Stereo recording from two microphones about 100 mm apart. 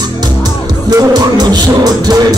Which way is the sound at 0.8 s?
45° right (ahead or behind).